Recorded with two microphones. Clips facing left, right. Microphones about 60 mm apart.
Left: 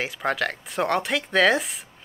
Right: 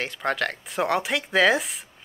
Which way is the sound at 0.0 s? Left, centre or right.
Centre.